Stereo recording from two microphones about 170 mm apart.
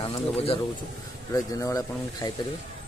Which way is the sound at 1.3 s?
20° left (ahead or behind).